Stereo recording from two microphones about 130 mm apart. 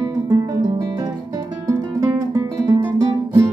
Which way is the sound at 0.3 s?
25° right (ahead or behind).